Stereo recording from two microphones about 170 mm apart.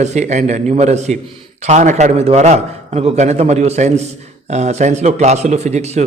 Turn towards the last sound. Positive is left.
turn(degrees=-40)  # may be behind; listen again after turning